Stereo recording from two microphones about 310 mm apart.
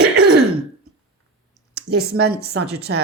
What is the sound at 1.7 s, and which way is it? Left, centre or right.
Speech, right.